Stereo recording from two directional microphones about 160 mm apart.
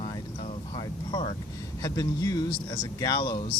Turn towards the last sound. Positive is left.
turn(degrees=25)  # may be behind; listen again after turning